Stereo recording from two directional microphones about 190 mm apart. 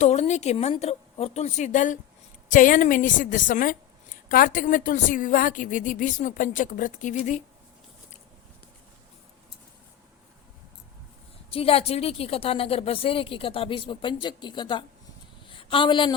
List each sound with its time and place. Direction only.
0.0 s a woman's voice: 35° left (ahead or behind)
11.5 s a woman's voice: 30° left (ahead or behind)